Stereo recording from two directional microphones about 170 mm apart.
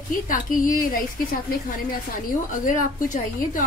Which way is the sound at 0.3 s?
50° left (ahead or behind).